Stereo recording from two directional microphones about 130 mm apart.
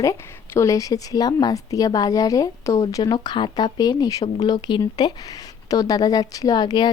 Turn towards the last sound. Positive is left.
turn(degrees=35)  # may be behind; listen again after turning